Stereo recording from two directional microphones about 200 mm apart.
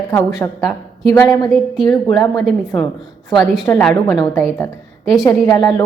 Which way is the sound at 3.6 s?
10° left (ahead or behind).